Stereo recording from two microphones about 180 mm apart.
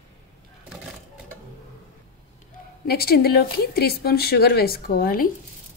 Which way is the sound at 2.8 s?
60° left (ahead or behind).